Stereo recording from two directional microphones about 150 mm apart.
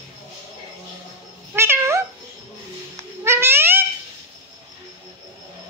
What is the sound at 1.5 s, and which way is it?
Cat, 15° right (ahead or behind).